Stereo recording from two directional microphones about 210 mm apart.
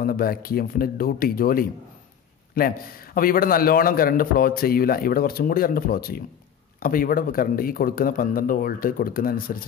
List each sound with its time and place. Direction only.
0.0 s a man's voice: 45° left (ahead or behind)
3.2 s a man's voice: 45° left (ahead or behind)